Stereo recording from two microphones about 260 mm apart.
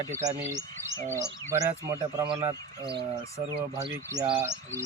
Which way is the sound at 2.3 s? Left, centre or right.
Centre.